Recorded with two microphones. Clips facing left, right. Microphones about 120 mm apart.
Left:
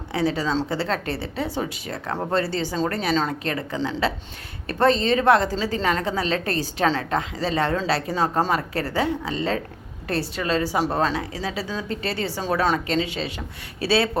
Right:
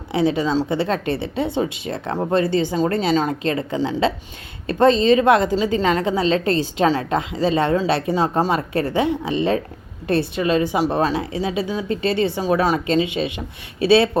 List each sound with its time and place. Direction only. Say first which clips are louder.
0.1 s a woman's voice: right 4 dB; 20° right (ahead or behind)